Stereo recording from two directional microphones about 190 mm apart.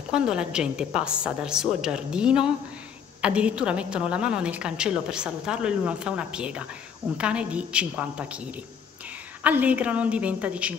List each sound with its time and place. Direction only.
0.1 s a woman's voice: 5° right (ahead or behind)
9.4 s a woman's voice: 10° right (ahead or behind)